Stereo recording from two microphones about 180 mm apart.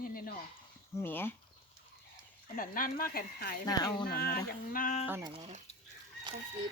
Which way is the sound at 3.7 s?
20° left (ahead or behind).